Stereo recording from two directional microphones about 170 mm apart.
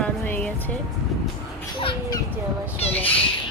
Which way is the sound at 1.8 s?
30° left (ahead or behind).